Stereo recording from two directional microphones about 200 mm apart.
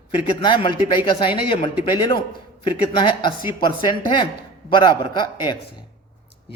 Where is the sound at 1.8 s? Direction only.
20° left (ahead or behind).